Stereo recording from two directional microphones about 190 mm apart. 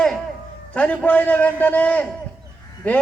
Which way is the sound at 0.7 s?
10° left (ahead or behind).